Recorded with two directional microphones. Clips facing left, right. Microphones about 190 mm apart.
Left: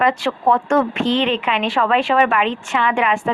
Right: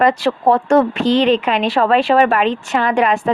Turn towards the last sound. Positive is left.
turn(degrees=-40)  # may be behind; listen again after turning